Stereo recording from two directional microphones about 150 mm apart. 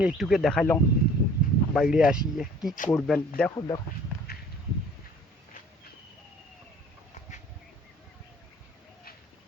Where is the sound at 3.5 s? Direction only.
30° left (ahead or behind).